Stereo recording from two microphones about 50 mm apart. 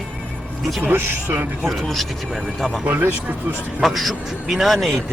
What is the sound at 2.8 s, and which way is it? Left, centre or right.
Speech, right.